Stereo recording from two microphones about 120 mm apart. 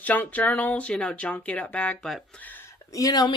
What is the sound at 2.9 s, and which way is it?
Speech, 30° left (ahead or behind).